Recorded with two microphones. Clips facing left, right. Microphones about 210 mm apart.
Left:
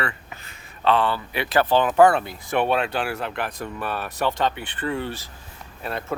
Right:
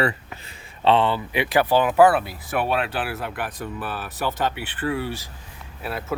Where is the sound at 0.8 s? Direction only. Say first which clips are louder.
Right 2 dB; 20° right (ahead or behind).